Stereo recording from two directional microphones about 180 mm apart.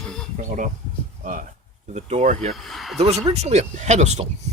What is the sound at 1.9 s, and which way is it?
Speech, 40° right (ahead or behind).